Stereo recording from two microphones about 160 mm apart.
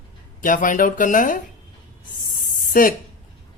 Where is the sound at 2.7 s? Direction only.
60° left (ahead or behind).